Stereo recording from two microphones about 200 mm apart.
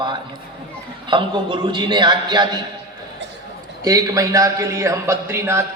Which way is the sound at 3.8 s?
15° right (ahead or behind).